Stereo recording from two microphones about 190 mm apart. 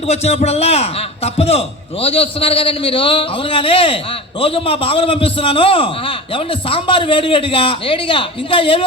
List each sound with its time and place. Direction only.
0.1 s a man's voice: 35° left (ahead or behind)